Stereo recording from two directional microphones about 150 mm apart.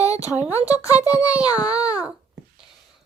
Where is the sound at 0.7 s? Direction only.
25° left (ahead or behind).